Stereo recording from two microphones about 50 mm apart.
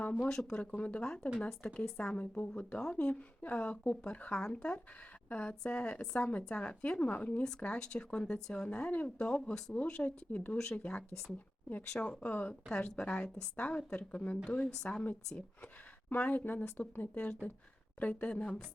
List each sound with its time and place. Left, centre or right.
0.0 s speech: left
4.4 s speech: centre; by 7.4 s left
7.6 s speech: left
9.0 s speech: centre
12.6 s speech: centre
16.0 s speech: left